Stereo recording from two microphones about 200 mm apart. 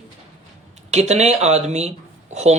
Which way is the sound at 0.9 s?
35° right (ahead or behind).